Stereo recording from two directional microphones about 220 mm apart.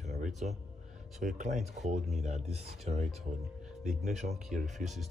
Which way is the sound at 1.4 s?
30° right (ahead or behind).